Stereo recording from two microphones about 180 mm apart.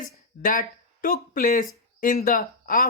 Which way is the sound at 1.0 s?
50° left (ahead or behind).